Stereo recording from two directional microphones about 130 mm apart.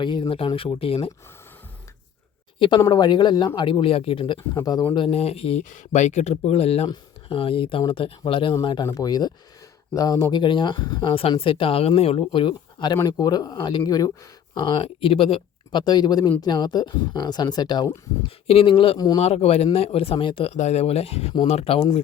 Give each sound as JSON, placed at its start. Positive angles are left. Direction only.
{"t": 0.0, "sound": "speech", "side_deg": 40}
{"t": 2.6, "sound": "speech", "side_deg": 35}
{"t": 4.5, "sound": "speech", "side_deg": 30}
{"t": 5.1, "sound": "speech", "side_deg": 50}
{"t": 5.6, "sound": "speech", "side_deg": 75}
{"t": 11.1, "sound": "speech", "side_deg": 45}
{"t": 14.5, "sound": "speech", "side_deg": 40}
{"t": 18.4, "sound": "speech", "side_deg": 45}
{"t": 19.2, "sound": "speech", "side_deg": 50}
{"t": 20.5, "sound": "speech", "side_deg": 60}